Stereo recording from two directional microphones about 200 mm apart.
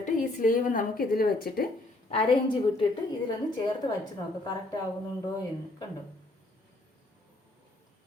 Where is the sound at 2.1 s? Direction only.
25° left (ahead or behind).